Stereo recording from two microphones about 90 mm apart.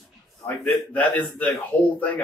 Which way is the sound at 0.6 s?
15° left (ahead or behind).